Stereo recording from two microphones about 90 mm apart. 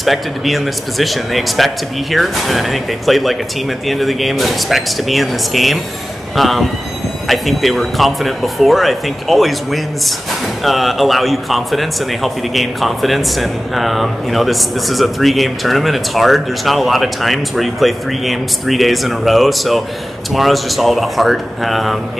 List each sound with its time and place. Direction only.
0.0 s a man's voice: centre (ahead or behind)